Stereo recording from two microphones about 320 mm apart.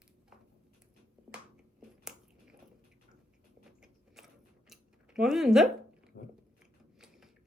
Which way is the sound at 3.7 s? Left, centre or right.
Centre.